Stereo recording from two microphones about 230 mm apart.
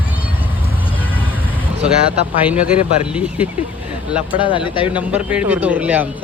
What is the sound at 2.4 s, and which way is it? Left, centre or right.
Speech, centre.